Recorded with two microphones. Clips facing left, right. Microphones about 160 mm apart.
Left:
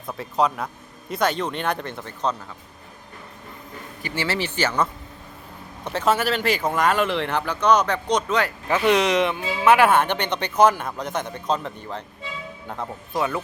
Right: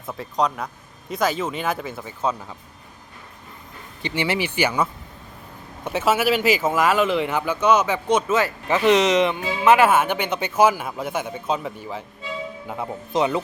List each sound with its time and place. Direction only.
0.1 s speech: centre (ahead or behind)
4.0 s speech: 20° right (ahead or behind)
13.1 s speech: 20° right (ahead or behind)